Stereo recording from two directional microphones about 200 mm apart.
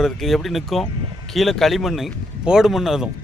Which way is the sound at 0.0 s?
Centre (ahead or behind).